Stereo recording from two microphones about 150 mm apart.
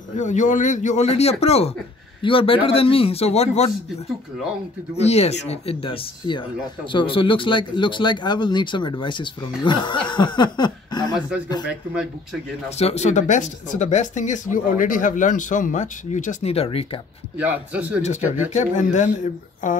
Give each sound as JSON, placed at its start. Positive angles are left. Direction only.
{"t": 0.2, "sound": "a man's voice", "side_deg": 55}
{"t": 4.9, "sound": "a man's voice", "side_deg": 45}
{"t": 11.1, "sound": "speech", "side_deg": -5}
{"t": 12.7, "sound": "speech", "side_deg": 45}
{"t": 17.4, "sound": "a man's voice", "side_deg": -10}
{"t": 18.5, "sound": "a man's voice", "side_deg": 55}